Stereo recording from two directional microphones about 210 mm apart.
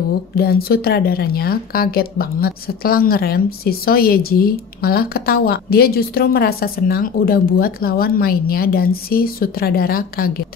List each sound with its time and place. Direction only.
0.4 s speech: 45° left (ahead or behind)